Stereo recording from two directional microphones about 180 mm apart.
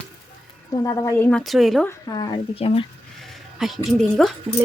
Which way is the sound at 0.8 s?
20° left (ahead or behind).